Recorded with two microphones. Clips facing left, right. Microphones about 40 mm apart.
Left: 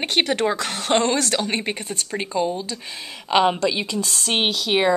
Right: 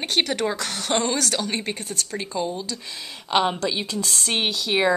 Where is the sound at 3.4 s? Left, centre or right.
Left.